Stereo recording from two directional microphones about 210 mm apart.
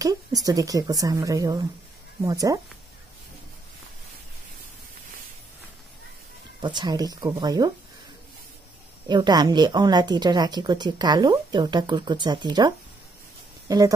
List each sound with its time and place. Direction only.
0.0 s speech: 15° right (ahead or behind)
6.6 s speech: 20° right (ahead or behind)
9.0 s speech: 20° right (ahead or behind)